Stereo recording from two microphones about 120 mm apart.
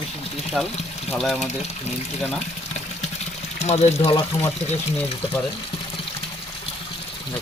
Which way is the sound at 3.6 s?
60° left (ahead or behind).